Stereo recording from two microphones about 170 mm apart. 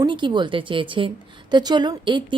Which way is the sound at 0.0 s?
25° right (ahead or behind).